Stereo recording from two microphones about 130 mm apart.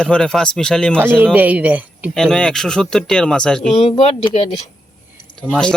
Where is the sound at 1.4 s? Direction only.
10° right (ahead or behind).